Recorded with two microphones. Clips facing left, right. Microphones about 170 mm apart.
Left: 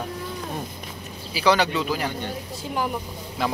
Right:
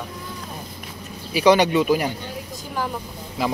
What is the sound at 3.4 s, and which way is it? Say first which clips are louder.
Speech: right 2 dB; 5° right (ahead or behind).